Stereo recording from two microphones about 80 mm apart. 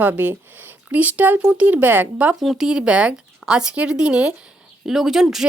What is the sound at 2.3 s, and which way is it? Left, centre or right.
Speech, centre.